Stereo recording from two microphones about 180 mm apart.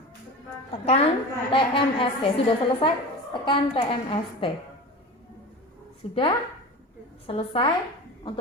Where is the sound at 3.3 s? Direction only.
25° left (ahead or behind).